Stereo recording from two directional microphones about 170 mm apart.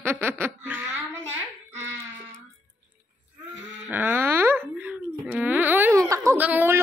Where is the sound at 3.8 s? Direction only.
10° right (ahead or behind).